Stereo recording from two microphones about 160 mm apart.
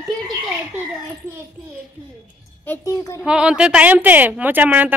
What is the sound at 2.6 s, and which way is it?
Speech, 15° left (ahead or behind).